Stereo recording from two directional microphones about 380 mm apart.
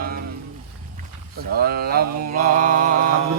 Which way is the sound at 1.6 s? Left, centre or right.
Right.